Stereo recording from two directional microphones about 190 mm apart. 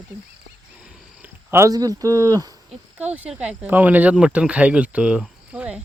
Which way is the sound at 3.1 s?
5° right (ahead or behind).